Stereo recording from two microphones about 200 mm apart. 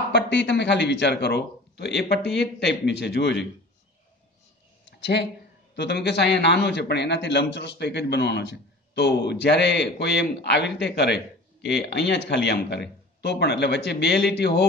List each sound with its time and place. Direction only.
0.1 s a man's voice: 60° left (ahead or behind)
4.8 s a sound: 60° left (ahead or behind)
5.8 s a man's voice: 55° left (ahead or behind)